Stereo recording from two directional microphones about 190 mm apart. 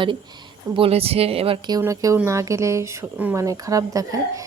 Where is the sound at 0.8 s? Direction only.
30° right (ahead or behind).